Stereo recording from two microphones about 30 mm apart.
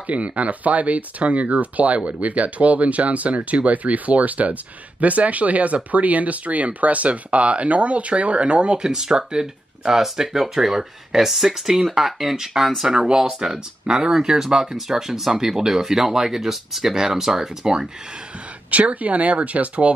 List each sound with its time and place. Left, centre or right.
0.0 s speech: right
8.7 s speech: right
9.9 s speech: centre
18.7 s speech: right